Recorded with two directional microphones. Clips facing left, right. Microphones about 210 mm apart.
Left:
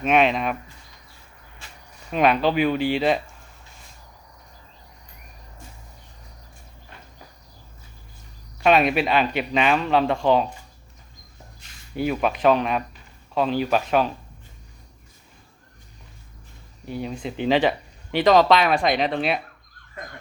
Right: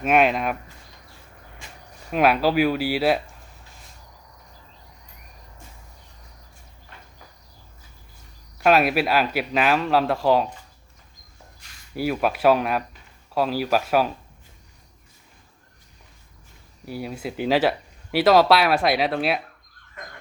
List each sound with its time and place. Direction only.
0.0 s speech: 5° right (ahead or behind)
2.0 s speech: 5° right (ahead or behind)
8.5 s speech: 5° right (ahead or behind)
11.9 s speech: 5° right (ahead or behind)
16.8 s speech: 5° right (ahead or behind)